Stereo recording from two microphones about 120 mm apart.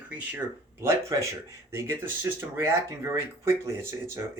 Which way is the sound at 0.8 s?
25° right (ahead or behind).